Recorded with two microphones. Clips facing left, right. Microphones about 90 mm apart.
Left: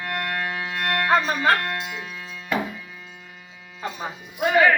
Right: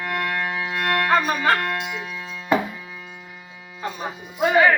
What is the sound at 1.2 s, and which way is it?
Speech, 5° right (ahead or behind).